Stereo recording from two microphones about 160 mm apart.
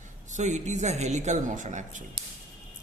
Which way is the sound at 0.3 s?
50° right (ahead or behind).